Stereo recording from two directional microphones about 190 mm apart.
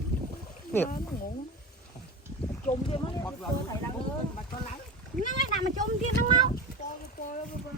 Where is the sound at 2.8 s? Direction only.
25° left (ahead or behind).